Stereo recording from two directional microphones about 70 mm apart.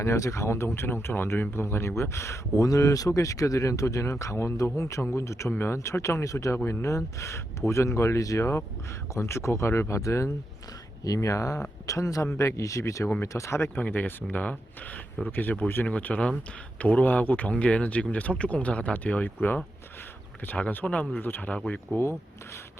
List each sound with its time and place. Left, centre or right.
0.0 s speech: left
5.5 s speech: left
13.7 s speech: left